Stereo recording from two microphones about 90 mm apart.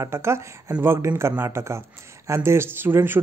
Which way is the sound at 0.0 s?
30° right (ahead or behind).